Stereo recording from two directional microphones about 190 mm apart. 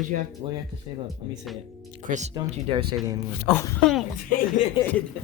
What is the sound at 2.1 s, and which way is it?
Speech, 40° right (ahead or behind).